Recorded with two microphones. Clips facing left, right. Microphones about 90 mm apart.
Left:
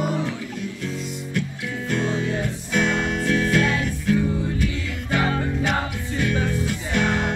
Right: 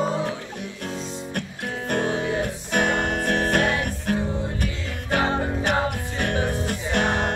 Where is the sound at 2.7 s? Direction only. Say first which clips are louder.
Even; 55° right (ahead or behind).